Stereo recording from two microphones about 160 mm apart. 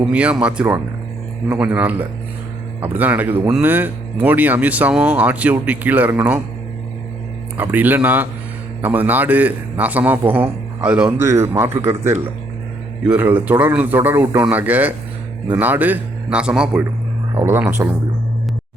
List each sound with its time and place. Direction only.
0.0 s speech: 5° right (ahead or behind)
7.5 s speech: 10° right (ahead or behind)